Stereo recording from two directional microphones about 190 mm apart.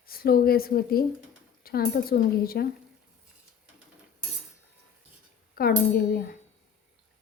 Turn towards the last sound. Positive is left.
turn(degrees=55)  # may be behind; listen again after turning